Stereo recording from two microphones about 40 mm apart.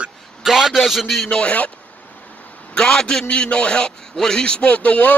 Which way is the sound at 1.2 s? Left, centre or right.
Left.